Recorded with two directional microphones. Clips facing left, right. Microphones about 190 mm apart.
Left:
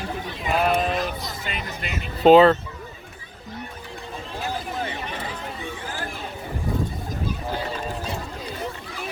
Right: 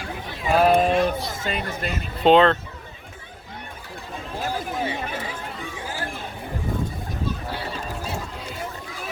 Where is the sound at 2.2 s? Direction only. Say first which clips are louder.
Left 3 dB; 5° left (ahead or behind).